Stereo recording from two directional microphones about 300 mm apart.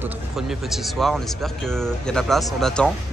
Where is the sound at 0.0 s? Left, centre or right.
Centre.